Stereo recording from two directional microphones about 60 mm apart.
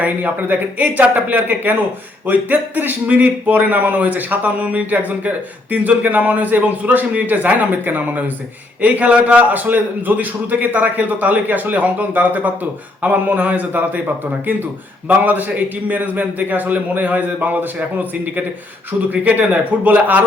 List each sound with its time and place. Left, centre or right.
0.0 s a man's voice: right